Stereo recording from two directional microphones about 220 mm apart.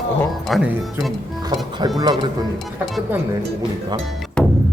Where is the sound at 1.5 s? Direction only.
20° right (ahead or behind).